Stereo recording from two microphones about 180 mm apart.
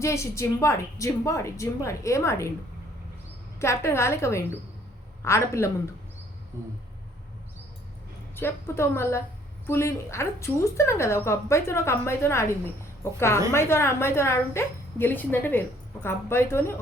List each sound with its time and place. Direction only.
0.0 s a woman's voice: 15° left (ahead or behind)
3.6 s a woman's voice: 15° left (ahead or behind)
8.4 s a woman's voice: 15° left (ahead or behind)